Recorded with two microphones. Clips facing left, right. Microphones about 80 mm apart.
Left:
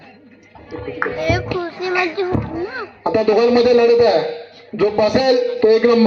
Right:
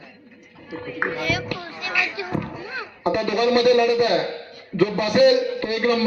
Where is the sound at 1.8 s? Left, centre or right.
Left.